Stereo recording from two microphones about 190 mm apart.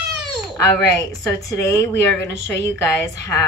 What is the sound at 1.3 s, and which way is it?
A woman's voice, 15° left (ahead or behind).